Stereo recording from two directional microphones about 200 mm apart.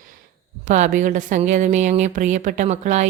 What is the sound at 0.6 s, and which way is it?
A woman's voice, 40° right (ahead or behind).